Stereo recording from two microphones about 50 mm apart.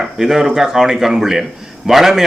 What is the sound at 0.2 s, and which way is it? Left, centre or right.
A man's voice, centre.